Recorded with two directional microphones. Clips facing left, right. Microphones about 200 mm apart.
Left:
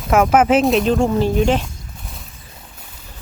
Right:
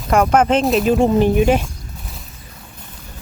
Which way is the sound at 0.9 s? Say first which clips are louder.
Right 3 dB; 20° right (ahead or behind).